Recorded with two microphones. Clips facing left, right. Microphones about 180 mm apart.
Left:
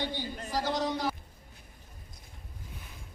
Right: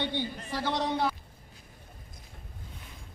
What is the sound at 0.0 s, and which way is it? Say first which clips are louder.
Speech: right 2 dB; 40° left (ahead or behind).